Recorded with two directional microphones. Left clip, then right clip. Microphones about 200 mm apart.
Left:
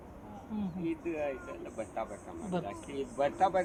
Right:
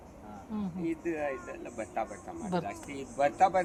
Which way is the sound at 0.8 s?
55° right (ahead or behind).